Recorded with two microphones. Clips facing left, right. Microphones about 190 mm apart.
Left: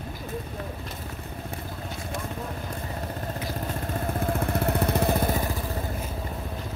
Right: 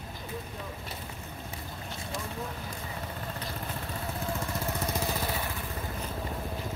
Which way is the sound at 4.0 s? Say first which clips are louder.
Left 7 dB; 55° left (ahead or behind).